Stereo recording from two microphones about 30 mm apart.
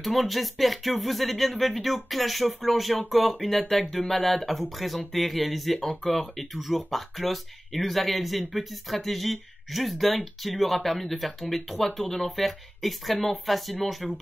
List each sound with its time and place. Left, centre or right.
0.0 s speech: centre